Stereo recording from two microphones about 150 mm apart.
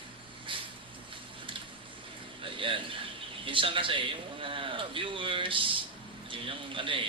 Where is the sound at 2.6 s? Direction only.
35° right (ahead or behind).